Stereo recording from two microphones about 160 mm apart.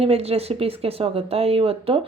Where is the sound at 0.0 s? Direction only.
40° right (ahead or behind).